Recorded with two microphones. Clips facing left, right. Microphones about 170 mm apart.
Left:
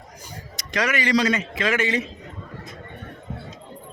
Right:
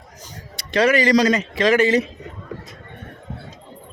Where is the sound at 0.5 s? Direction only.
30° right (ahead or behind).